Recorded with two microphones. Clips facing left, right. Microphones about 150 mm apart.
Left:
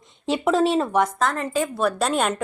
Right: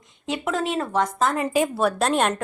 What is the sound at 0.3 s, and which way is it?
Speech, 30° left (ahead or behind).